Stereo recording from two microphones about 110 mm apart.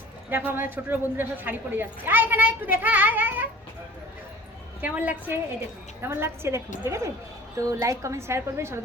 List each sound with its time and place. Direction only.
0.3 s a child's voice: 20° right (ahead or behind)
4.8 s a child's voice: 15° right (ahead or behind)